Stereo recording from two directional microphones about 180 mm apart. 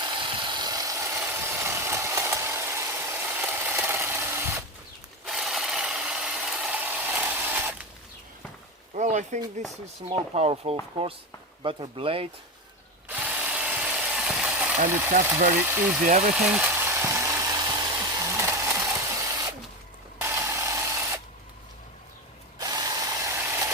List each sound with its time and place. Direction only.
0.0 s vehicle: 25° right (ahead or behind)
5.2 s mechanisms: centre (ahead or behind)
9.0 s a sound: 40° right (ahead or behind)
10.1 s speech: 30° right (ahead or behind)
13.1 s ratchet: 10° right (ahead or behind)
15.1 s speech: 45° right (ahead or behind)
15.5 s speech: 10° right (ahead or behind)
16.0 s speech: 50° right (ahead or behind)
16.3 s engine: 5° right (ahead or behind)
18.3 s printer: 15° right (ahead or behind)
20.1 s a sound: 15° right (ahead or behind)
22.5 s ratchet: 20° right (ahead or behind)